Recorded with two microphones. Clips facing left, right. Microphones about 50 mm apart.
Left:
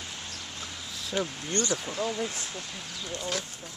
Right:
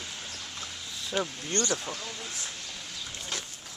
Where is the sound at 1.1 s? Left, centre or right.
Centre.